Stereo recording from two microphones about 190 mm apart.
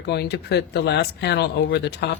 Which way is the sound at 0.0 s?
60° left (ahead or behind).